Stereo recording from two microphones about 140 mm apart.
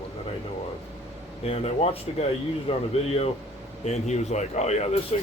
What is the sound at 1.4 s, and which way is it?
Speech, 45° left (ahead or behind).